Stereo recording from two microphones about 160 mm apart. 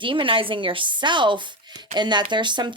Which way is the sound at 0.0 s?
30° right (ahead or behind).